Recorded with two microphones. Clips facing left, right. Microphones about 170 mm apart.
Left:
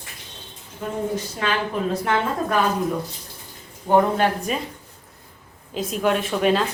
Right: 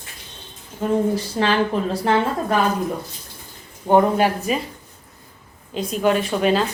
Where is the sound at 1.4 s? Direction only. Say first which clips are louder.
Right 5 dB; 35° right (ahead or behind).